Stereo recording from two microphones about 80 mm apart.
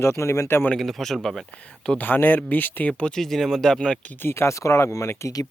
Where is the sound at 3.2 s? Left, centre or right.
Centre.